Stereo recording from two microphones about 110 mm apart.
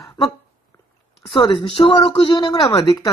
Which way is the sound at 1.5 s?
55° left (ahead or behind).